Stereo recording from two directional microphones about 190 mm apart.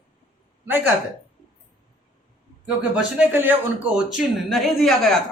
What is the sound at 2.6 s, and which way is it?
A man's voice, 5° right (ahead or behind).